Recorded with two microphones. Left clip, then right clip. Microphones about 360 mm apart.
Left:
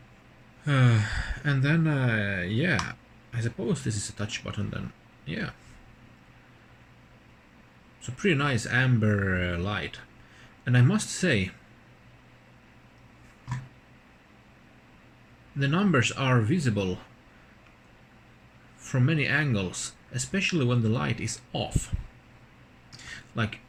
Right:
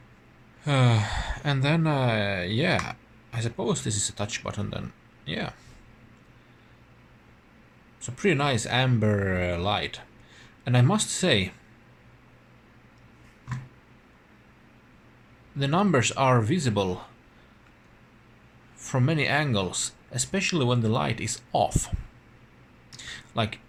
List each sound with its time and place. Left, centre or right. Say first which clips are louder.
0.6 s speech: right 2 dB; centre
8.0 s speech: right 2 dB; centre
15.5 s speech: right 2 dB; centre
18.8 s speech: right 2 dB; centre
23.0 s a sound: right 4 dB; centre